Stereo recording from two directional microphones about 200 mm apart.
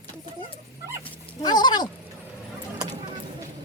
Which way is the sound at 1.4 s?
20° left (ahead or behind).